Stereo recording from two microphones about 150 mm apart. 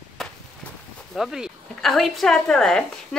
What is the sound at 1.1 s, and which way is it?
Speech, centre (ahead or behind).